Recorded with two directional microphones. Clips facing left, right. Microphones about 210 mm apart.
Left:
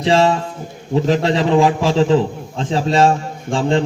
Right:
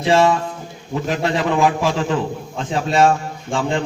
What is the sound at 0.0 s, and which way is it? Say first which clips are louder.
A man's voice: left 1 dB; 25° left (ahead or behind).